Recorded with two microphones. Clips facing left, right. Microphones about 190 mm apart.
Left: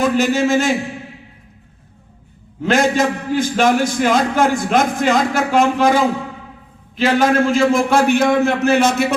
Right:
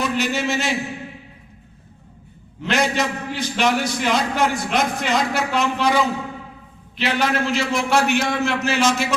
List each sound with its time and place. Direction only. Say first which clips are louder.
0.0 s a man's voice: left 7 dB; 50° left (ahead or behind)
2.6 s a man's voice: left 6 dB; 45° left (ahead or behind)